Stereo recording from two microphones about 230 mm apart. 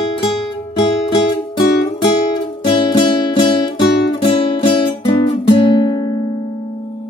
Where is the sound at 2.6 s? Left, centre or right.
Left.